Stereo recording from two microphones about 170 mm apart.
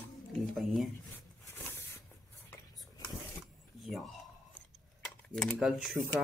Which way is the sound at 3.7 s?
Centre (ahead or behind).